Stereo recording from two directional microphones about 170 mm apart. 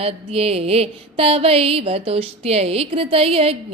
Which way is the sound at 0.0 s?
35° right (ahead or behind).